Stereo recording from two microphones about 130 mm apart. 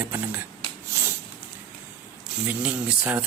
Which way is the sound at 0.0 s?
15° right (ahead or behind).